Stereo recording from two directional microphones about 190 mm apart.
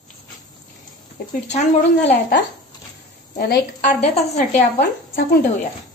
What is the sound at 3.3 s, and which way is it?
Speech, 55° left (ahead or behind).